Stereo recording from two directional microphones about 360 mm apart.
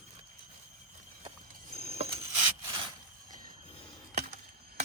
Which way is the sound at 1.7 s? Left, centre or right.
Centre.